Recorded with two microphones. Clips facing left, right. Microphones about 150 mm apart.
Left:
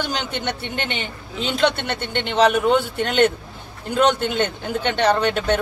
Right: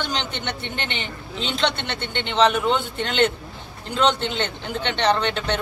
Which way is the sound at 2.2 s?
45° left (ahead or behind).